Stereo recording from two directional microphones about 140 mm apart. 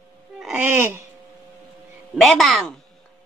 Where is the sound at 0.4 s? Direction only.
5° right (ahead or behind).